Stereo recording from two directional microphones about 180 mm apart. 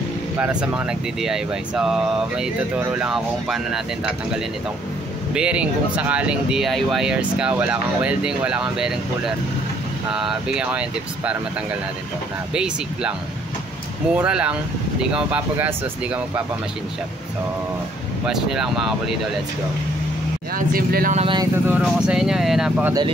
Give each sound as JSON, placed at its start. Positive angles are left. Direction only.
{"t": 0.4, "sound": "speech", "side_deg": -5}
{"t": 12.5, "sound": "speech", "side_deg": -5}
{"t": 14.1, "sound": "speech", "side_deg": -5}
{"t": 18.2, "sound": "speech", "side_deg": -5}
{"t": 20.5, "sound": "speech", "side_deg": -55}
{"t": 21.2, "sound": "speech", "side_deg": -25}
{"t": 21.6, "sound": "speech", "side_deg": -5}